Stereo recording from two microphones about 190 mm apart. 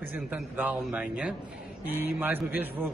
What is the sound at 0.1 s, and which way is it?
A man's voice, 10° right (ahead or behind).